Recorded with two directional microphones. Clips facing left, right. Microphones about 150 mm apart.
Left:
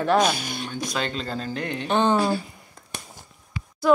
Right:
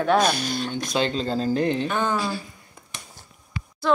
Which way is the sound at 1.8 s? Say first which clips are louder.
Left 4 dB; 25° left (ahead or behind).